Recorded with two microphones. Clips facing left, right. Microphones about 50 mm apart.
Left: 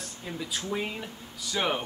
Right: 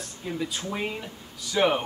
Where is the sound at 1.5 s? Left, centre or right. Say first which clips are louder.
Right 6 dB; centre.